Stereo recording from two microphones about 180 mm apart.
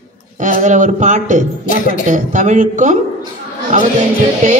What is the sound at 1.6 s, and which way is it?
Speech, 50° left (ahead or behind).